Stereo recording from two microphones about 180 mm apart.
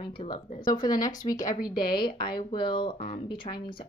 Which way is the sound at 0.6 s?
50° left (ahead or behind).